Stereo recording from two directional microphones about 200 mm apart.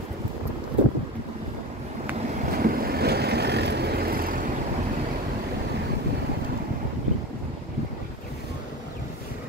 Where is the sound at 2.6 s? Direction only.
45° right (ahead or behind).